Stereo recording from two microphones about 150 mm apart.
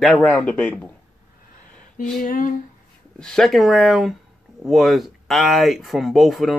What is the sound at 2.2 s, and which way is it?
Speech, 65° left (ahead or behind).